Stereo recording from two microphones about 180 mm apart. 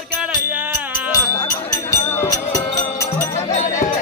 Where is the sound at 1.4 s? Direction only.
20° left (ahead or behind).